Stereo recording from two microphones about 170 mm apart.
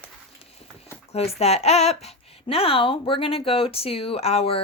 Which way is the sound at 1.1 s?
35° left (ahead or behind).